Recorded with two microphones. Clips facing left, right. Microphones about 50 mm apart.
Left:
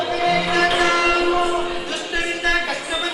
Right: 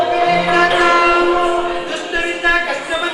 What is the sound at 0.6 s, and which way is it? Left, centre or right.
Train, centre.